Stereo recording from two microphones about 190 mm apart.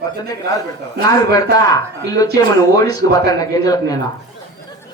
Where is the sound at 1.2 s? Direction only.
20° left (ahead or behind).